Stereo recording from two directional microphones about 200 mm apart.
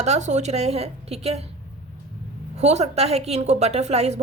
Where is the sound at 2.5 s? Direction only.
35° right (ahead or behind).